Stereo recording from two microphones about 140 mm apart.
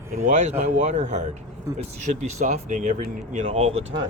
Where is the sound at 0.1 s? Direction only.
55° right (ahead or behind).